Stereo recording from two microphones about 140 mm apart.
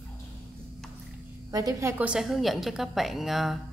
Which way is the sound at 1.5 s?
30° right (ahead or behind).